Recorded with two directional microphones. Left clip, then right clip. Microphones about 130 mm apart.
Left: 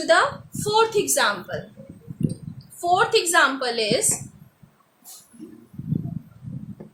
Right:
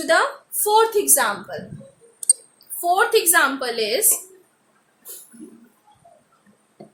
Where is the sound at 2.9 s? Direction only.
15° right (ahead or behind).